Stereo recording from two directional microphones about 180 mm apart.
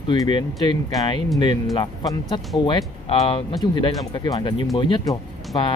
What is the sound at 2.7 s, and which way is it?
Speech, 30° left (ahead or behind).